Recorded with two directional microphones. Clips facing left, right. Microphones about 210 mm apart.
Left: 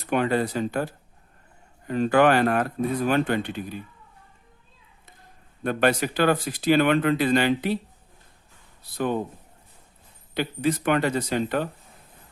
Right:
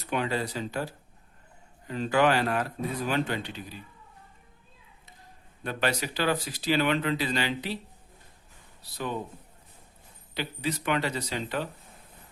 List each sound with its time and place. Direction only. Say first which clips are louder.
0.1 s speech: left 6 dB; 55° left (ahead or behind)
5.6 s speech: left 7 dB; 55° left (ahead or behind)
9.0 s speech: left 7 dB; 50° left (ahead or behind)
10.3 s speech: left 7 dB; 50° left (ahead or behind)